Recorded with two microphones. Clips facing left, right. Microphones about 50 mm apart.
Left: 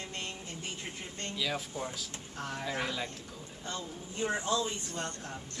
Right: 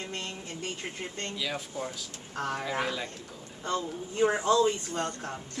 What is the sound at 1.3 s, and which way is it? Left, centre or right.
Speech, centre.